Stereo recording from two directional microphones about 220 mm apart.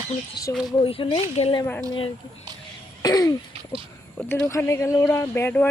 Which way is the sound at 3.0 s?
15° left (ahead or behind).